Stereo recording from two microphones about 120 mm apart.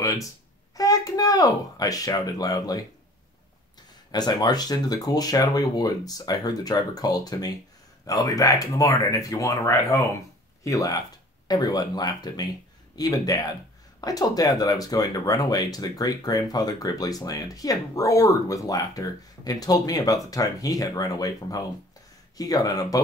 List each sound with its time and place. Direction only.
0.7 s speech: 30° left (ahead or behind)
4.1 s speech: 35° left (ahead or behind)